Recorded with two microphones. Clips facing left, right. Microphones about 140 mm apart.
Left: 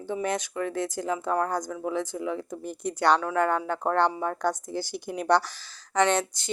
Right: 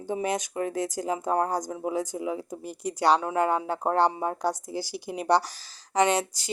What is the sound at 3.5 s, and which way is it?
Speech, 35° right (ahead or behind).